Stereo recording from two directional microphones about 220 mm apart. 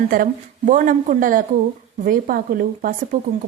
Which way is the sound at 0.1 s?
40° right (ahead or behind).